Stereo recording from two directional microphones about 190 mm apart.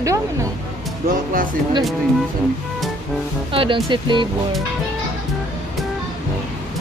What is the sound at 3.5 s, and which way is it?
Speech, 30° right (ahead or behind).